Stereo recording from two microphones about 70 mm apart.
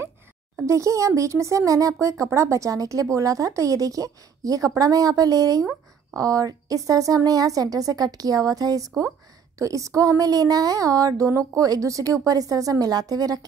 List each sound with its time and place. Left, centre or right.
0.7 s speech: right